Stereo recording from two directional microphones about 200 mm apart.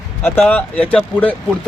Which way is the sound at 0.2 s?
5° left (ahead or behind).